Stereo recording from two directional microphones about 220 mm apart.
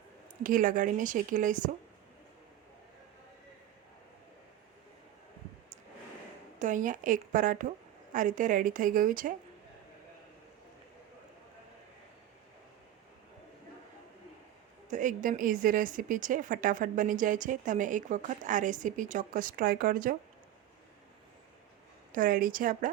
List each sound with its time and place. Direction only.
0.4 s a woman's voice: 40° right (ahead or behind)
6.6 s a woman's voice: 35° right (ahead or behind)
14.8 s a woman's voice: 35° right (ahead or behind)
22.1 s a woman's voice: 40° right (ahead or behind)